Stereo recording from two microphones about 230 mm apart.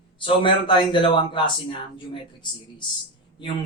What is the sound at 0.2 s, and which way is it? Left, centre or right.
Speech, left.